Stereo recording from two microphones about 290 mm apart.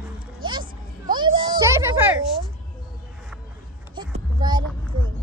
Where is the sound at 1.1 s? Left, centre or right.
Centre.